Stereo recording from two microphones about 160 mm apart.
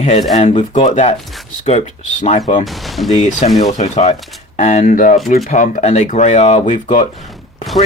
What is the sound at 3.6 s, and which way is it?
Speech, 45° left (ahead or behind).